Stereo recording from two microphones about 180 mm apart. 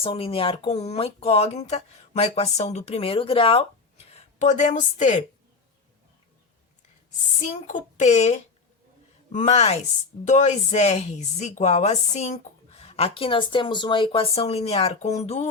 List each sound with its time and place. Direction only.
0.0 s speech: 30° left (ahead or behind)
7.3 s speech: 40° left (ahead or behind)